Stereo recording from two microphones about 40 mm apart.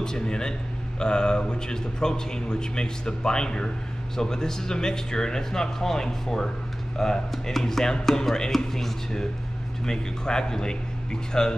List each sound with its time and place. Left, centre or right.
0.0 s speech: centre